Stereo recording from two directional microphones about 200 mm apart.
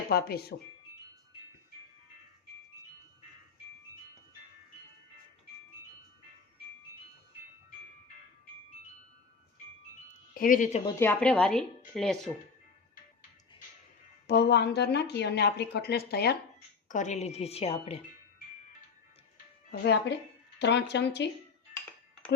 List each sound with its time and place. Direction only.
0.1 s speech: 50° left (ahead or behind)
10.3 s a woman's voice: 45° left (ahead or behind)
11.0 s a woman's voice: 5° left (ahead or behind)
14.3 s a woman's voice: 55° left (ahead or behind)
16.9 s a woman's voice: 35° left (ahead or behind)
19.8 s a woman's voice: 55° left (ahead or behind)